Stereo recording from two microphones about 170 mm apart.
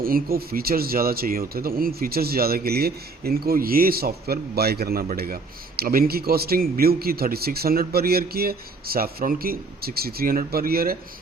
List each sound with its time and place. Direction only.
0.0 s speech: 60° right (ahead or behind)